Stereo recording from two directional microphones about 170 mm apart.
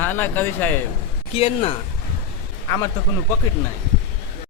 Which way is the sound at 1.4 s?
35° left (ahead or behind).